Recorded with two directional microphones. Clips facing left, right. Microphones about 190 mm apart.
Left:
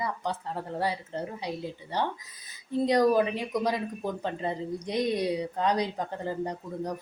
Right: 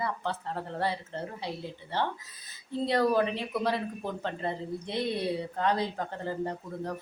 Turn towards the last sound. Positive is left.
turn(degrees=15)  # may be behind; listen again after turning